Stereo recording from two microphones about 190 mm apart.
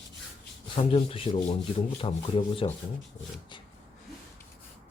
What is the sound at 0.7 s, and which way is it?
Speech, 30° left (ahead or behind).